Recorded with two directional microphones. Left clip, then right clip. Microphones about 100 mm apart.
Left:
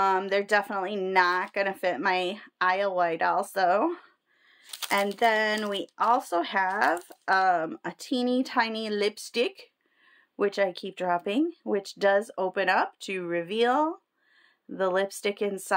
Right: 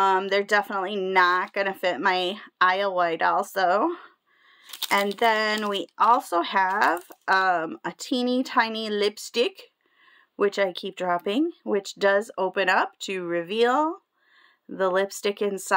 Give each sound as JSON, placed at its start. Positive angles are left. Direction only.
{"t": 0.0, "sound": "speech", "side_deg": -30}
{"t": 5.1, "sound": "speech", "side_deg": -35}